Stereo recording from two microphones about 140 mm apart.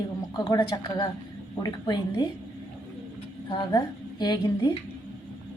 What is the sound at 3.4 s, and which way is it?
A woman's voice, 35° left (ahead or behind).